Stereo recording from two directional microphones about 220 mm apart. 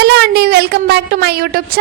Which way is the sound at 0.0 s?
50° right (ahead or behind).